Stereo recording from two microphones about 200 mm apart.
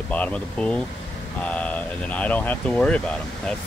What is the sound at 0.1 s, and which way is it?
Speech, 5° left (ahead or behind).